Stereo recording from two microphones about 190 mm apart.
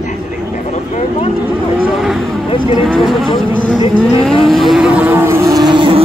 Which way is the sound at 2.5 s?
25° left (ahead or behind).